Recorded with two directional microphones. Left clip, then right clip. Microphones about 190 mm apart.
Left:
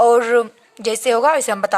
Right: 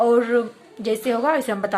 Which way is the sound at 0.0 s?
50° left (ahead or behind).